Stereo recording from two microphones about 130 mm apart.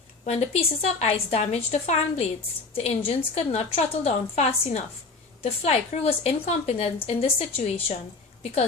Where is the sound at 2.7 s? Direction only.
45° left (ahead or behind).